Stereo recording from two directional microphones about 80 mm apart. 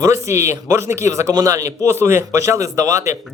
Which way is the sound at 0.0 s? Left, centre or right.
Right.